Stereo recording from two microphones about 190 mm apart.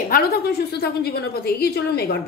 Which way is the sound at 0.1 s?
55° left (ahead or behind).